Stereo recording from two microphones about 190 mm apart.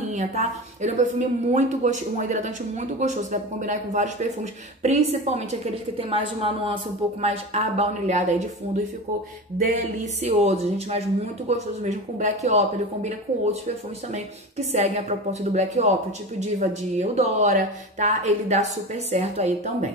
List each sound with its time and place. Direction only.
0.1 s a woman's voice: 40° right (ahead or behind)
9.6 s a woman's voice: 35° right (ahead or behind)